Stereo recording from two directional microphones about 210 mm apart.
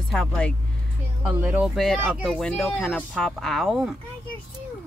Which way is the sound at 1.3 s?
10° right (ahead or behind).